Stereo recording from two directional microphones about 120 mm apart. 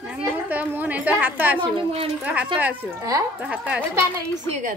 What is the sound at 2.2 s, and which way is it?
Speech, 10° right (ahead or behind).